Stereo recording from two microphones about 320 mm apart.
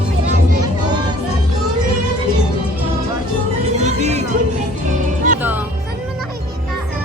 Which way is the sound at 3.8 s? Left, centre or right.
Right.